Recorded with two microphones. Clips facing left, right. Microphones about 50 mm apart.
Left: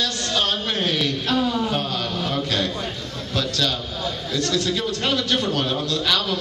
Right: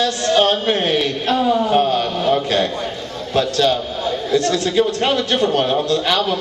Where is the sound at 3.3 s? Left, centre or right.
Right.